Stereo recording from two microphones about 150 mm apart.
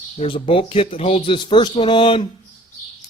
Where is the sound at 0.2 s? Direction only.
35° left (ahead or behind).